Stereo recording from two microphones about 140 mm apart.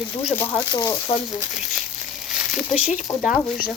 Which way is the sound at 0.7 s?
30° left (ahead or behind).